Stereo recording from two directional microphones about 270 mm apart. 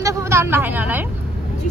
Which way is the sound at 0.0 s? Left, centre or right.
Centre.